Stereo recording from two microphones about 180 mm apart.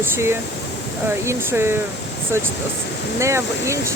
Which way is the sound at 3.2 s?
15° right (ahead or behind).